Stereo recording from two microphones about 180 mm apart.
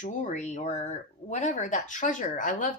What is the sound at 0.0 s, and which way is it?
A woman's voice, 45° left (ahead or behind).